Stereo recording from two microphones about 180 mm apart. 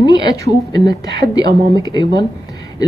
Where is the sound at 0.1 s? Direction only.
25° left (ahead or behind).